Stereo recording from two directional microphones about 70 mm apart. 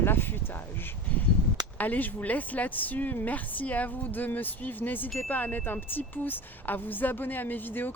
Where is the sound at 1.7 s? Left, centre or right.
Left.